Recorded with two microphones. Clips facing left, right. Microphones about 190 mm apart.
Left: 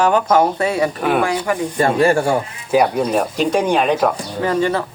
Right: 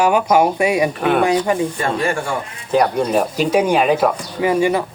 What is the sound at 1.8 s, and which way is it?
Speech, 40° left (ahead or behind).